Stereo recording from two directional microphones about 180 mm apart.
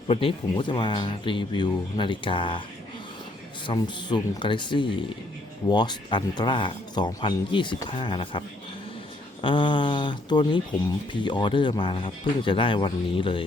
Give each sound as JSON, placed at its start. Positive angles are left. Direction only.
{"t": 0.1, "sound": "speech", "side_deg": 30}
{"t": 3.7, "sound": "speech", "side_deg": 25}